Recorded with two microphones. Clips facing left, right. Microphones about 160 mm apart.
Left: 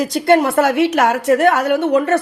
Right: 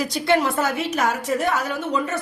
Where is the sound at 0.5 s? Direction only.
70° left (ahead or behind).